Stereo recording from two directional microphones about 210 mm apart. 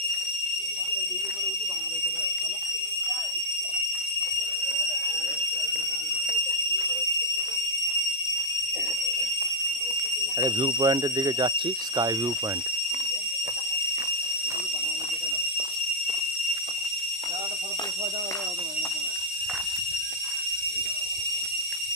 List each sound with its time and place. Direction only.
10.4 s speech: 20° right (ahead or behind)